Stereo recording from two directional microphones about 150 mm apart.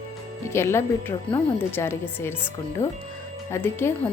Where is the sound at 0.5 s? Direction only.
15° left (ahead or behind).